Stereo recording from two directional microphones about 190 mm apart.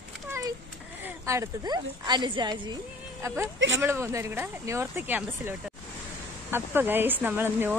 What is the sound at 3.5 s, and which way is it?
Speech, 80° right.